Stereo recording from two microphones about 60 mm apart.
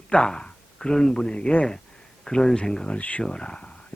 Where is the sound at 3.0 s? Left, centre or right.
Left.